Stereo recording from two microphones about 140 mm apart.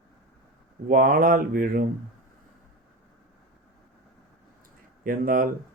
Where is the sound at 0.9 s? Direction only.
90° right.